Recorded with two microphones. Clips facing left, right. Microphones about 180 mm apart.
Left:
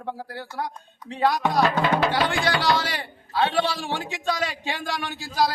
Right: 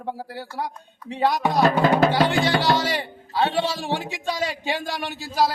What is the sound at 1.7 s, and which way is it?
Speech, 40° right (ahead or behind).